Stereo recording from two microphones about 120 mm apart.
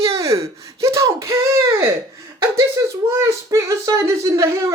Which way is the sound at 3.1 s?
25° right (ahead or behind).